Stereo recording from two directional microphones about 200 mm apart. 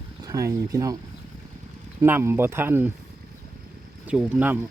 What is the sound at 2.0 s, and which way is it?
Speech, 10° right (ahead or behind).